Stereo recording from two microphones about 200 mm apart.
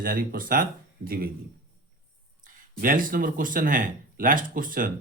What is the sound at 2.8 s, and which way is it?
Speech, 45° right (ahead or behind).